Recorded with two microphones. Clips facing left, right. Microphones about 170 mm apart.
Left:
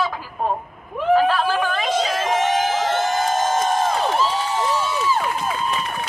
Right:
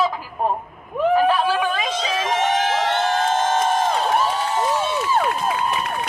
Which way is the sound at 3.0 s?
65° right (ahead or behind).